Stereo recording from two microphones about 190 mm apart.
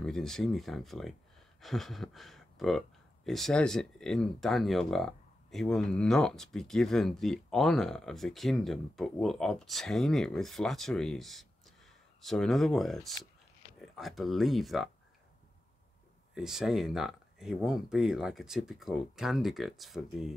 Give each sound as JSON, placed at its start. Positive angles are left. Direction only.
{"t": 0.0, "sound": "speech", "side_deg": 0}
{"t": 16.3, "sound": "speech", "side_deg": 0}